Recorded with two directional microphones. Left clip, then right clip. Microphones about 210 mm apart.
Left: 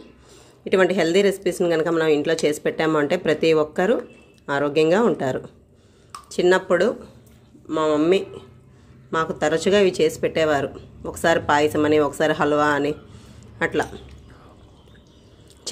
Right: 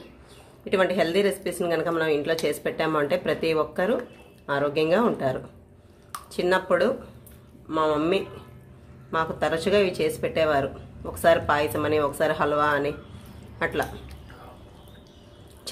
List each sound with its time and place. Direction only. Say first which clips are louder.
0.7 s speech: left 4 dB; 35° left (ahead or behind)